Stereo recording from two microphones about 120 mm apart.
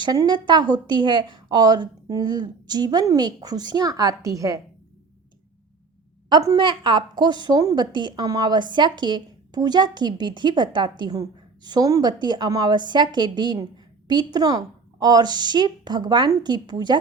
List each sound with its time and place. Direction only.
0.0 s a woman's voice: 35° right (ahead or behind)
6.2 s a woman's voice: 35° right (ahead or behind)